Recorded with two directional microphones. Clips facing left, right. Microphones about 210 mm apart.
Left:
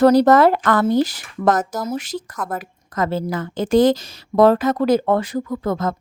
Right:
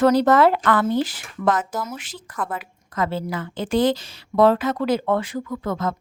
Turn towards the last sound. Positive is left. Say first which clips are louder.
# left 3 dB
turn(degrees=40)  # may be behind; listen again after turning